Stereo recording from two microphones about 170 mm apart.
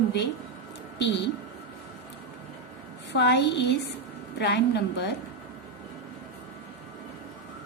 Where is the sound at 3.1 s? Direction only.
85° left.